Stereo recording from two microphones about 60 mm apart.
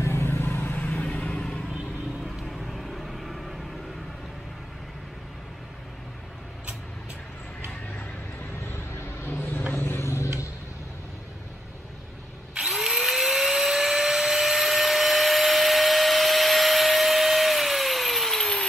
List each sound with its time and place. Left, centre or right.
0.0 s vehicle: left
0.7 s vehicle: left
2.4 s vehicle: centre
8.9 s a sound: left
9.8 s vehicle: left
12.5 s drill: centre